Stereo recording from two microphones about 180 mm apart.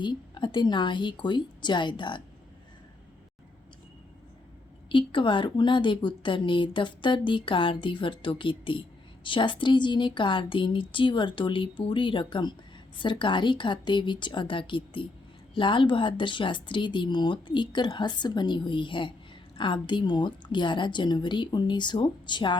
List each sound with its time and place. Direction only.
0.0 s speech: 25° left (ahead or behind)
4.9 s speech: 30° left (ahead or behind)